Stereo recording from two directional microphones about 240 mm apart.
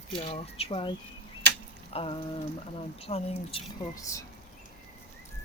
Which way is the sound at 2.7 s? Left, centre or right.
Left.